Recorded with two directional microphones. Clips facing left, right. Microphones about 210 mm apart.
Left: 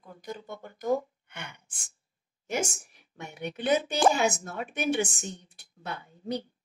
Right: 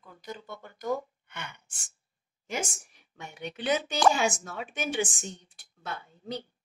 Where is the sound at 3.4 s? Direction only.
55° left (ahead or behind).